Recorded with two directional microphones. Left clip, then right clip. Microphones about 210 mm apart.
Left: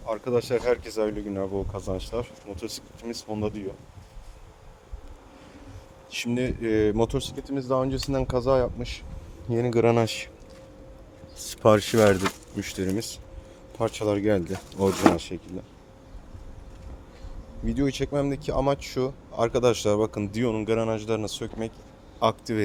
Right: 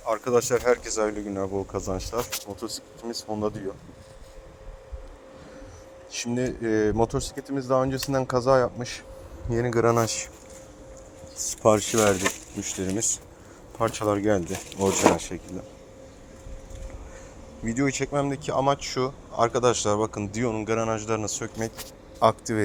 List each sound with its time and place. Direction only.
0.0 s speech: 5° left (ahead or behind)
0.5 s speech: 15° left (ahead or behind)
6.1 s speech: 15° left (ahead or behind)
9.5 s speech: 20° left (ahead or behind)
11.3 s speech: 30° left (ahead or behind)
11.9 s speech: 50° left (ahead or behind)
12.5 s speech: 30° left (ahead or behind)
17.7 s speech: 10° left (ahead or behind)
22.2 s a man's voice: centre (ahead or behind)